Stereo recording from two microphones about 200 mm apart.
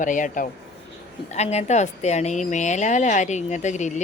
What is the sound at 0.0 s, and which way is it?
A woman's voice, 40° left (ahead or behind).